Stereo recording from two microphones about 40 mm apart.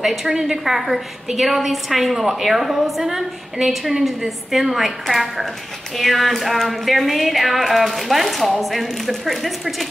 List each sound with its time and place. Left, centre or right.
0.0 s a woman's voice: centre